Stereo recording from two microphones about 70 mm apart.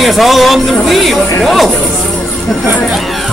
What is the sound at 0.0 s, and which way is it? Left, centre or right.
Speech, centre.